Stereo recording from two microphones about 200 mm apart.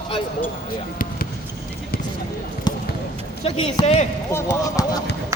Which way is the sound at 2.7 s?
20° left (ahead or behind).